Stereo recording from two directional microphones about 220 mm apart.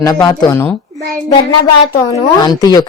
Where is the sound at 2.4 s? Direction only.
20° left (ahead or behind).